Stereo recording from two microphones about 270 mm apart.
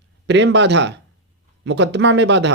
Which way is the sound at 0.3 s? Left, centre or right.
Right.